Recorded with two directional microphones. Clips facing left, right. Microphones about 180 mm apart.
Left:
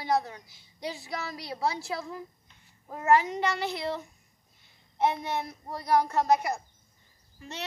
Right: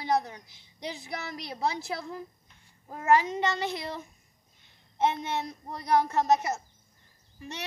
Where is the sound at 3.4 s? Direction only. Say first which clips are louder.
Even; 20° right (ahead or behind).